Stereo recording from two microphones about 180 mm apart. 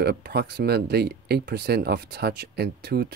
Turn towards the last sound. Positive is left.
turn(degrees=-65)  # may be behind; listen again after turning